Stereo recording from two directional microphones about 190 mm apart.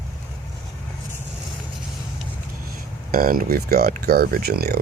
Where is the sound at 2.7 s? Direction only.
50° right (ahead or behind).